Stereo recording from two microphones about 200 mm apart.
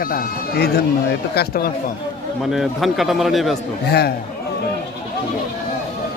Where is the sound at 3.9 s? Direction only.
55° left (ahead or behind).